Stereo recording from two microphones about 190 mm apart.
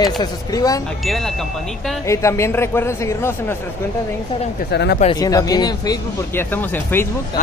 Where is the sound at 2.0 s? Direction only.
15° left (ahead or behind).